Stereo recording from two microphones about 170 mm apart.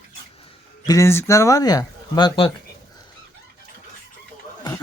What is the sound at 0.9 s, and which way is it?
Speech, 15° left (ahead or behind).